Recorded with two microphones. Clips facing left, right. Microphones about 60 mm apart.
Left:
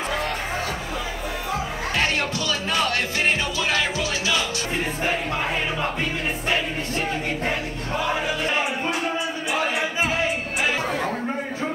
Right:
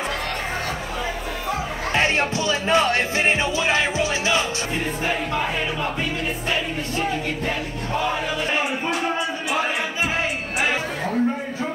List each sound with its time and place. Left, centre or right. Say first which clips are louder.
2.0 s music: right 4 dB; right